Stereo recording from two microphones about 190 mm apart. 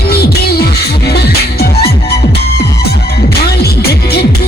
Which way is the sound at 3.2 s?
55° left (ahead or behind).